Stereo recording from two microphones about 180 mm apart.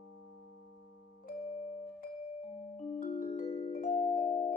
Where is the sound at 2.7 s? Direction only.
40° left (ahead or behind).